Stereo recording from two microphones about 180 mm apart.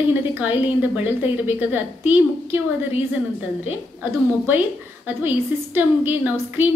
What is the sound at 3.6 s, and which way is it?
Speech, 10° right (ahead or behind).